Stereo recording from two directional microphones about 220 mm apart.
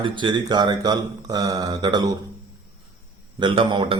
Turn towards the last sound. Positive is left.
turn(degrees=-20)  # may be behind; listen again after turning